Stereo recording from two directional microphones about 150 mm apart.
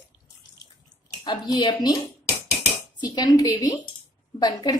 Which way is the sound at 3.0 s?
25° left (ahead or behind).